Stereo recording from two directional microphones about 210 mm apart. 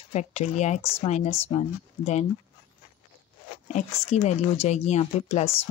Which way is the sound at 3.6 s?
35° left (ahead or behind).